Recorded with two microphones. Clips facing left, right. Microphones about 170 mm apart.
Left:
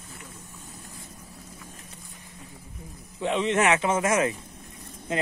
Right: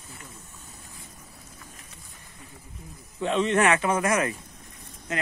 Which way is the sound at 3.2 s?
15° left (ahead or behind).